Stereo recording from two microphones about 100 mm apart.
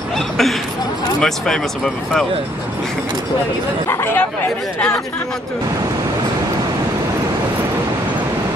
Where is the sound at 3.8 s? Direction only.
25° left (ahead or behind).